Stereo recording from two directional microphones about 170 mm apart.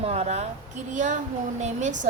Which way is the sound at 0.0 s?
40° right (ahead or behind).